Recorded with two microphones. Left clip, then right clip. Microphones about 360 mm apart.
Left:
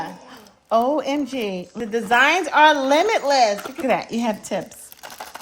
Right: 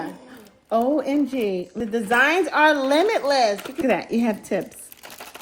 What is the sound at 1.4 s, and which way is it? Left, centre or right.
Speech, left.